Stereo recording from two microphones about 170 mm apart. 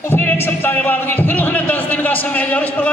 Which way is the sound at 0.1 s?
15° left (ahead or behind).